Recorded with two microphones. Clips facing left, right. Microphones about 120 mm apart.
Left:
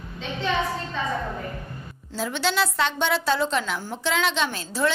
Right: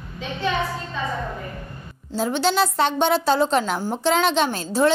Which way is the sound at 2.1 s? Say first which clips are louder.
Right 5 dB; 40° right (ahead or behind).